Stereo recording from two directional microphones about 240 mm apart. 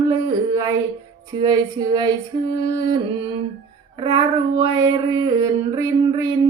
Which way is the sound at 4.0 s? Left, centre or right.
Centre.